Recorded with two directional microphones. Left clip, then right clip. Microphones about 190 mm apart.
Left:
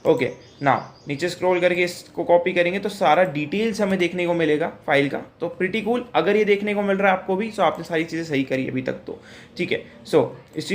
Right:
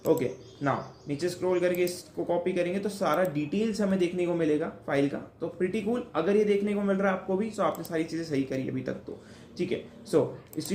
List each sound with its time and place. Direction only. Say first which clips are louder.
0.0 s speech: left 7 dB; 15° left (ahead or behind)